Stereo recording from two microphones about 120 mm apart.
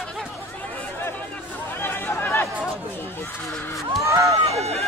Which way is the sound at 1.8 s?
20° left (ahead or behind).